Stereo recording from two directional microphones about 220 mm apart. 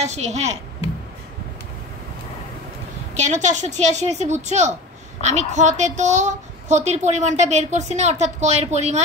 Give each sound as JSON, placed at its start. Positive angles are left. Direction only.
{"t": 0.0, "sound": "a woman's voice", "side_deg": -30}
{"t": 3.2, "sound": "a woman's voice", "side_deg": -35}